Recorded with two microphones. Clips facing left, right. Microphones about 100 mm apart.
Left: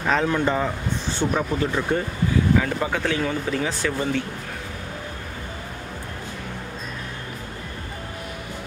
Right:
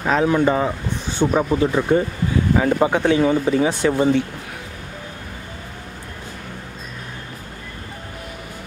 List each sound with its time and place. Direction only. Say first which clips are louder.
0.0 s speech: right 4 dB; 10° right (ahead or behind)
2.5 s speech: right 5 dB; 30° right (ahead or behind)